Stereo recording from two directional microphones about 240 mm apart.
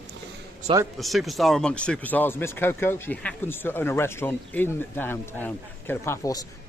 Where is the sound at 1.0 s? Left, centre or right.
Centre.